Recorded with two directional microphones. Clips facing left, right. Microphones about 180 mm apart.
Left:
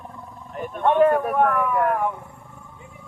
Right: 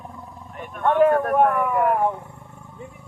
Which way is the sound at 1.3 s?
5° right (ahead or behind).